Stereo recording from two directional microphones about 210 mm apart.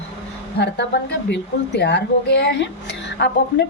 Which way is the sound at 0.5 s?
50° left (ahead or behind).